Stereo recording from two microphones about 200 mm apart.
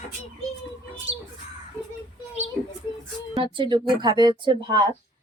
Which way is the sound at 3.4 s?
25° right (ahead or behind).